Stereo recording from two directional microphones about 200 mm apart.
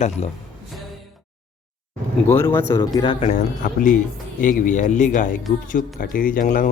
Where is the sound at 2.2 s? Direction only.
10° left (ahead or behind).